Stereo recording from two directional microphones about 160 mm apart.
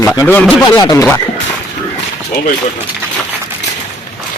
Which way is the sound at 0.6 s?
25° left (ahead or behind).